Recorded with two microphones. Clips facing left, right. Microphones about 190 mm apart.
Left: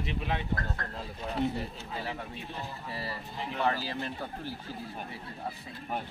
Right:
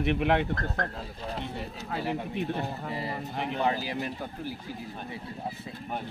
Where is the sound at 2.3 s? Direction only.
65° right (ahead or behind).